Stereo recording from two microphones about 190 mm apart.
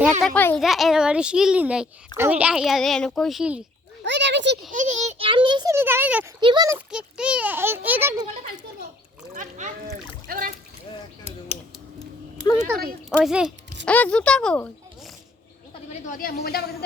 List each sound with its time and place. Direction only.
0.2 s a child's voice: 5° left (ahead or behind)
4.0 s speech: 70° right (ahead or behind)
4.7 s a child's voice: 40° right (ahead or behind); by 6.3 s 10° right (ahead or behind)
6.4 s a child's voice: 20° right (ahead or behind)
6.7 s a child's voice: 5° right (ahead or behind)
9.3 s a child's voice: 40° right (ahead or behind)
13.1 s a child's voice: 5° right (ahead or behind)
13.8 s speech: 5° left (ahead or behind)
15.9 s speech: 45° left (ahead or behind)